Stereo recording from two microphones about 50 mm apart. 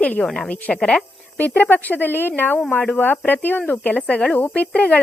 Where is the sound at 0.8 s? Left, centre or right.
Centre.